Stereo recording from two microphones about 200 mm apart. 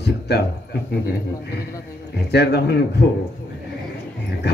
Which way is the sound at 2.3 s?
55° left (ahead or behind).